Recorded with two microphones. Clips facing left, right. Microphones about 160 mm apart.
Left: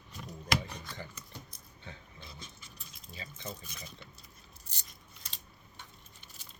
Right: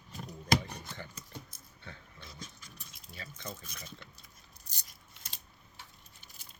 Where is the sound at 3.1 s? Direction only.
25° left (ahead or behind).